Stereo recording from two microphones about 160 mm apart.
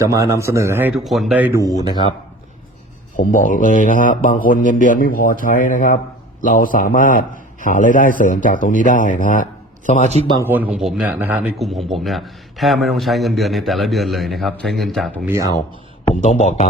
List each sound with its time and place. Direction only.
0.0 s speech: 20° right (ahead or behind)
1.0 s speech: centre (ahead or behind)
1.9 s speech: 30° left (ahead or behind)
3.2 s a man's voice: 55° left (ahead or behind)
10.4 s speech: 10° right (ahead or behind)
11.5 s a man's voice: centre (ahead or behind)
16.2 s speech: 45° left (ahead or behind)